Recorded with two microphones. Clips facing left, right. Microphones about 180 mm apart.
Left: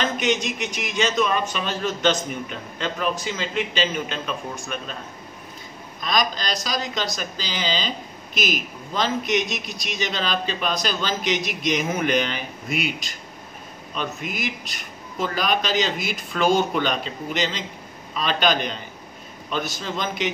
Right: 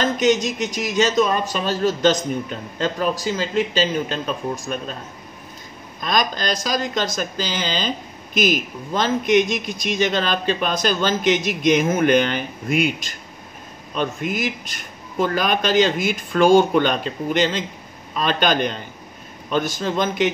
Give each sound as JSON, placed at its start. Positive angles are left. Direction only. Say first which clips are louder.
{"t": 0.0, "sound": "speech", "louder": "right 5 dB", "side_deg": -40}
{"t": 5.9, "sound": "speech", "louder": "right 2 dB", "side_deg": -50}
{"t": 13.9, "sound": "speech", "louder": "right 6 dB", "side_deg": -50}